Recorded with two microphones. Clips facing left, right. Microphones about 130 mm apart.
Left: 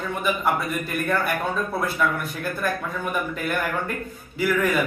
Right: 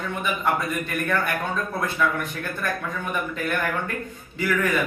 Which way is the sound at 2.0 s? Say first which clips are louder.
Even; 5° left (ahead or behind).